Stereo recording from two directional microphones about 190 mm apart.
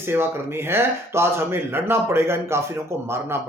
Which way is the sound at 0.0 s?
10° right (ahead or behind).